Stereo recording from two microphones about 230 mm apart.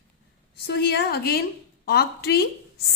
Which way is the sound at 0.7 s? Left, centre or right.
Left.